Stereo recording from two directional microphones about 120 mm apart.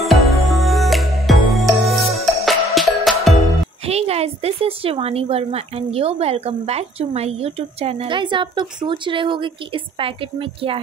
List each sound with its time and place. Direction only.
0.0 s music: centre (ahead or behind)
3.8 s a woman's voice: 55° right (ahead or behind)